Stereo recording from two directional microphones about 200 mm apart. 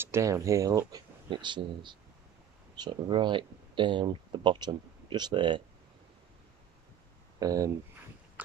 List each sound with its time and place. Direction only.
0.0 s speech: 15° right (ahead or behind)
7.3 s speech: 15° right (ahead or behind)
8.4 s a sound: 10° right (ahead or behind)